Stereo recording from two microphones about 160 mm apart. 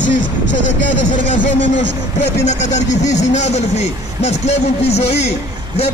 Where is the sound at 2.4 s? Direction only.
45° left (ahead or behind).